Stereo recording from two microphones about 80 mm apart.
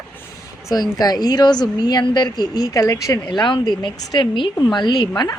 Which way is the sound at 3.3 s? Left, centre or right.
Left.